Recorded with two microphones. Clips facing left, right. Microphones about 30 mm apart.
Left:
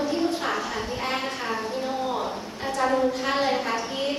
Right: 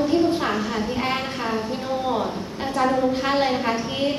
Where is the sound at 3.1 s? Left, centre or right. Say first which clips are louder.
Right 3 dB; right.